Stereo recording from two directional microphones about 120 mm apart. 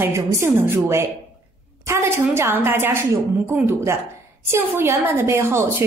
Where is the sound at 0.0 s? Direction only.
20° right (ahead or behind).